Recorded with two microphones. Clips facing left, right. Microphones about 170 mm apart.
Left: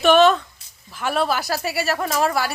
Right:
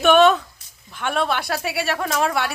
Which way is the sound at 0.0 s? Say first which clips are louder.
Even; centre (ahead or behind).